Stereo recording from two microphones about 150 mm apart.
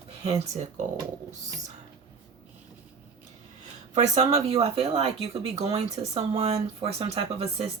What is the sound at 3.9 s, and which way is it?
Speech, 45° right (ahead or behind).